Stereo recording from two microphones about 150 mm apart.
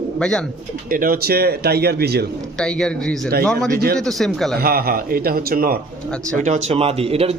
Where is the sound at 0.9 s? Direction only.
70° right (ahead or behind); by 2.2 s 90° right.